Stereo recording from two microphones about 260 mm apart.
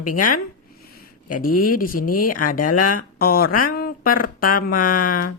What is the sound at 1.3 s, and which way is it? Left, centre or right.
Speech, left.